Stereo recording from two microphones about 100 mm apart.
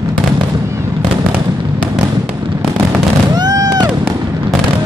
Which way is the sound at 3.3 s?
40° right (ahead or behind).